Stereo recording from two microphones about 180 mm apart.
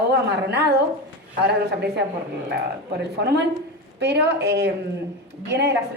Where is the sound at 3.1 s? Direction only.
65° right (ahead or behind).